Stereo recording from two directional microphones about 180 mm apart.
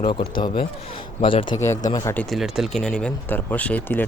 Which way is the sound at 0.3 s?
30° left (ahead or behind).